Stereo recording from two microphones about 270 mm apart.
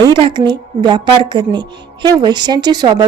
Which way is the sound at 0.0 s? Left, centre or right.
Centre.